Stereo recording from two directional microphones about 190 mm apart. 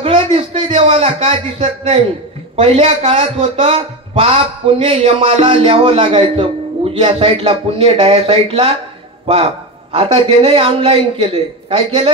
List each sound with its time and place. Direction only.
0.0 s speech: 30° right (ahead or behind)